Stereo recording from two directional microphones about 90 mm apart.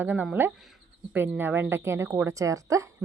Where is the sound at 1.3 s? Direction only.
25° right (ahead or behind).